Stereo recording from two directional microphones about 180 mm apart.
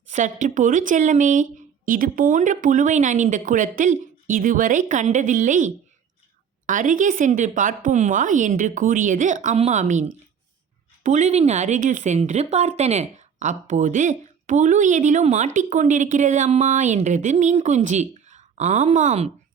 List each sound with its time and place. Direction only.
0.1 s speech: 45° right (ahead or behind)